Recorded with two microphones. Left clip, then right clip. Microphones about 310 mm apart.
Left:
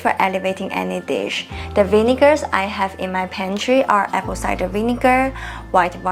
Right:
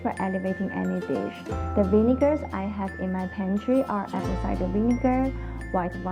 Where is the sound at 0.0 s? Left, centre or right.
Centre.